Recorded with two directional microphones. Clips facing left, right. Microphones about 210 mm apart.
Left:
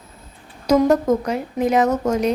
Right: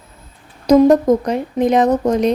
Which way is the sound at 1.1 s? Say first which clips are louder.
Right 4 dB; 35° right (ahead or behind).